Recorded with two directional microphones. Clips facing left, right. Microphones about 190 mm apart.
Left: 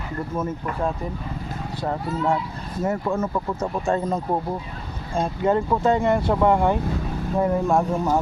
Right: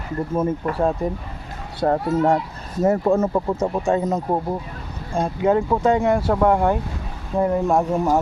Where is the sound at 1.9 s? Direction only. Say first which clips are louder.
Right 6 dB; 50° right (ahead or behind); by 3.7 s 35° right (ahead or behind).